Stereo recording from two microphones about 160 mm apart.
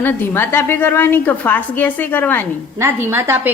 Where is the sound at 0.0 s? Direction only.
15° left (ahead or behind).